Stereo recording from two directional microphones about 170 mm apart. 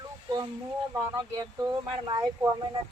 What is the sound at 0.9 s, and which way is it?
Speech, 20° right (ahead or behind).